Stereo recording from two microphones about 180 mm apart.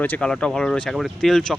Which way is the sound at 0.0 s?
5° left (ahead or behind).